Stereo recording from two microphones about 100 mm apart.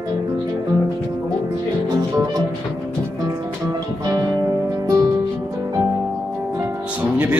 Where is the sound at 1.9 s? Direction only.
35° right (ahead or behind).